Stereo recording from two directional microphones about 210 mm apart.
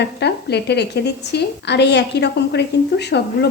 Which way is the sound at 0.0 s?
50° left (ahead or behind).